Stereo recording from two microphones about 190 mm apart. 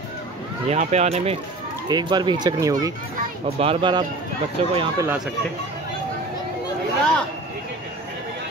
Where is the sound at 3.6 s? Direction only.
30° right (ahead or behind).